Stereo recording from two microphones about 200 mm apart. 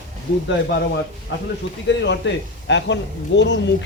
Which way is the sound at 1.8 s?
60° left (ahead or behind).